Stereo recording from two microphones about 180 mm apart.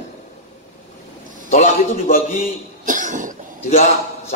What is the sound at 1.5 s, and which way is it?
A man's voice, 45° left (ahead or behind).